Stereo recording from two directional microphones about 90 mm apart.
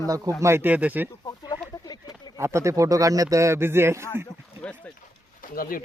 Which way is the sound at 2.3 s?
35° right (ahead or behind).